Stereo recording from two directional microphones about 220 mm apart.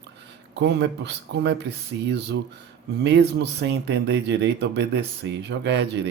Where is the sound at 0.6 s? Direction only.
50° right (ahead or behind).